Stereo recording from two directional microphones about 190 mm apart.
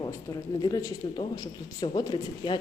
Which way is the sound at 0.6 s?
20° left (ahead or behind).